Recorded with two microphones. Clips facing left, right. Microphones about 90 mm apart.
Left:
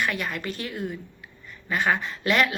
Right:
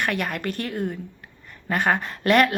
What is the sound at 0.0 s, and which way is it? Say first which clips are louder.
A woman's voice: right 2 dB; 55° right (ahead or behind).